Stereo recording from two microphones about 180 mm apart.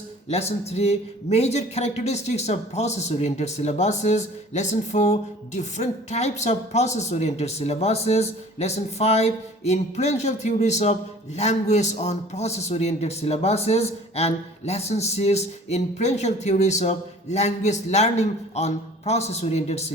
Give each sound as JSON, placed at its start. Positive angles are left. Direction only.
{"t": 0.3, "sound": "a man's voice", "side_deg": 35}